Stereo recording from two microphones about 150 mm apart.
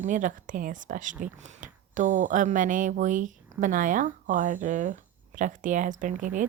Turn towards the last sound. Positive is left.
turn(degrees=-60)  # may be behind; listen again after turning